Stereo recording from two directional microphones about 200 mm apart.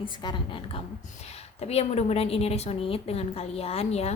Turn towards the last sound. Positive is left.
turn(degrees=30)  # may be behind; listen again after turning